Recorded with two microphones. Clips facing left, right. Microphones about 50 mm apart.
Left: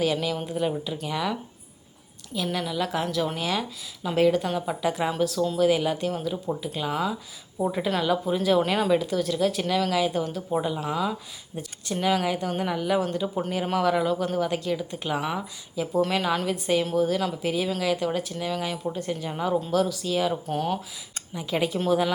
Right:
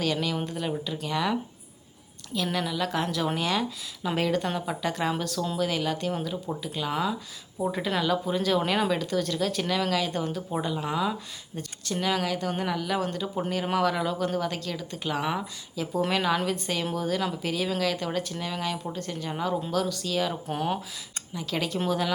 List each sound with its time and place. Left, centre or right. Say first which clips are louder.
0.0 s speech: left 2 dB; centre
11.5 s speech: left 1 dB; centre
15.2 s speech: even; centre
20.5 s speech: left 2 dB; centre
21.3 s speech: left 3 dB; centre